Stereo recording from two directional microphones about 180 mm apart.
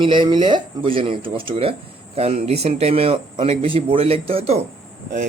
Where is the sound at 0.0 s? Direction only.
25° right (ahead or behind).